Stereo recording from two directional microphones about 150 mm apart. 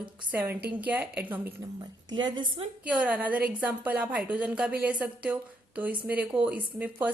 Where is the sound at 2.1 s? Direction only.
30° right (ahead or behind).